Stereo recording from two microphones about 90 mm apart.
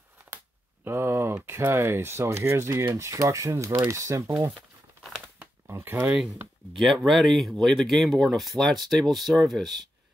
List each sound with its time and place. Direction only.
0.8 s a sound: 30° right (ahead or behind)
1.4 s speech: 25° right (ahead or behind)
5.7 s speech: 25° right (ahead or behind)
7.0 s speech: centre (ahead or behind)